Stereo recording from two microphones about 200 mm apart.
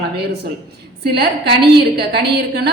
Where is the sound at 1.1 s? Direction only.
55° right (ahead or behind).